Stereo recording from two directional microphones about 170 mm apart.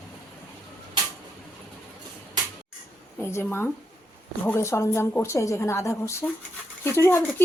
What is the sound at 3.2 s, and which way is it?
A woman's voice, 15° left (ahead or behind).